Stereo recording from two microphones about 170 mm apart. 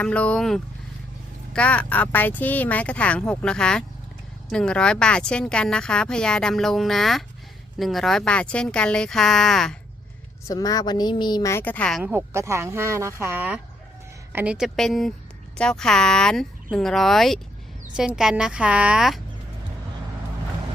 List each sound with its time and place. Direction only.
0.0 s speech: 5° left (ahead or behind)
10.4 s a woman's voice: 20° left (ahead or behind)
11.5 s speech: 10° left (ahead or behind)
12.0 s a woman's voice: 15° right (ahead or behind)